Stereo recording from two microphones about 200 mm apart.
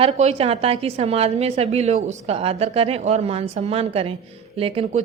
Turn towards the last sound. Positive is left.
turn(degrees=-30)  # may be behind; listen again after turning